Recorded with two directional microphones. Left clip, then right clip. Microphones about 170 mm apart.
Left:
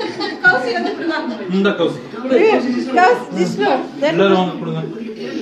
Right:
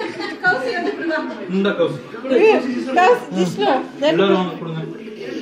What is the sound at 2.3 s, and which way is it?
A woman's voice, 35° right (ahead or behind).